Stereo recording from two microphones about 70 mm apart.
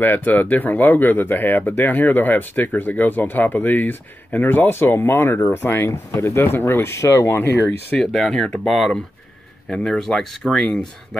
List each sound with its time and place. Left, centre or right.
0.0 s speech: left
8.0 s speech: centre